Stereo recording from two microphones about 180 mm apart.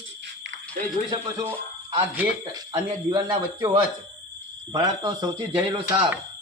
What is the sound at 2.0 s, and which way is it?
Speech, 15° right (ahead or behind).